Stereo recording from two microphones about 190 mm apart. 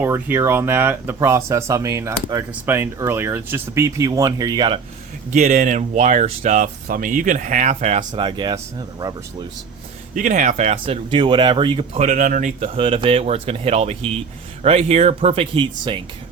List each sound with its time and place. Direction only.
0.0 s speech: 10° right (ahead or behind)
5.3 s speech: 40° right (ahead or behind)
8.1 s speech: 25° right (ahead or behind)
10.2 s speech: 40° right (ahead or behind); by 11.9 s 25° right (ahead or behind)
11.9 s speech: 45° right (ahead or behind); by 16.0 s 25° right (ahead or behind)